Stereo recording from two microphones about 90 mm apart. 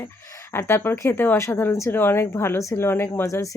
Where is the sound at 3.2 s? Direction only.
40° left (ahead or behind).